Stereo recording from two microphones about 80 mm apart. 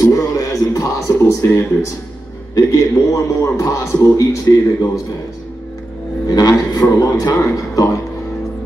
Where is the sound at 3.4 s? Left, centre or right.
Left.